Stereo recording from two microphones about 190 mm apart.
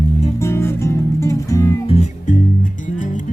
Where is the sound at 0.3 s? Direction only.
15° left (ahead or behind).